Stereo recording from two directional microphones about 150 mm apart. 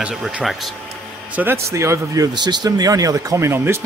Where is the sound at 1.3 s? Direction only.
15° right (ahead or behind).